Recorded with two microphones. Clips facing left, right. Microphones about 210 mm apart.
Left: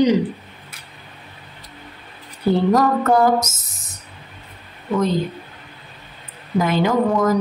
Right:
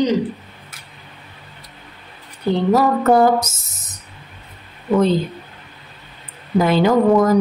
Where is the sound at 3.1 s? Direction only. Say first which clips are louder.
Right 4 dB; 30° right (ahead or behind).